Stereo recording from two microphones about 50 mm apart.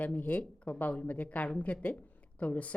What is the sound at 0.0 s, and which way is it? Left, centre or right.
A woman's voice, left.